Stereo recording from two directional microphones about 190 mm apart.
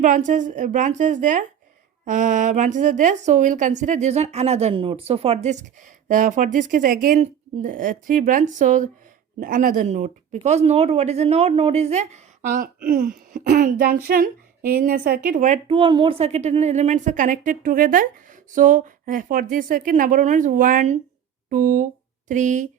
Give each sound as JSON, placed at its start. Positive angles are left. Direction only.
{"t": 0.3, "sound": "a woman's voice", "side_deg": -40}